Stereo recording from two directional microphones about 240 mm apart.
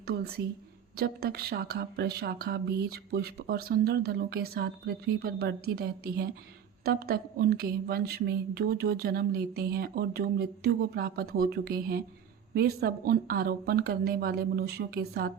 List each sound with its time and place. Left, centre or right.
0.1 s speech: right